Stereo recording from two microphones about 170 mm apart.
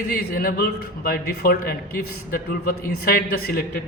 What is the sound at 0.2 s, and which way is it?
A man's voice, 60° left (ahead or behind).